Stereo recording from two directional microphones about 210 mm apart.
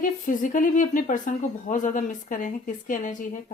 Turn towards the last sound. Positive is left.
turn(degrees=35)  # may be behind; listen again after turning